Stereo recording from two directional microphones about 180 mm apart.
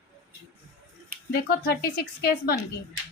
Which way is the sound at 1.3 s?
55° left (ahead or behind).